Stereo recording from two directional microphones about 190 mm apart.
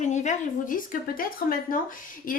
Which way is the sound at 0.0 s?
40° left (ahead or behind).